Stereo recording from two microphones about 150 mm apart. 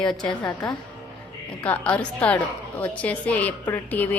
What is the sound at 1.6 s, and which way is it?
A woman's voice, 10° left (ahead or behind).